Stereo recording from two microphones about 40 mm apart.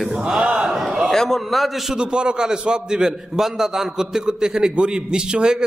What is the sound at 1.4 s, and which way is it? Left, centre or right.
Speech, centre.